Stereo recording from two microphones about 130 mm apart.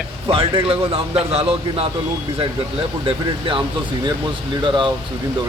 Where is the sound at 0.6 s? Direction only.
45° right (ahead or behind).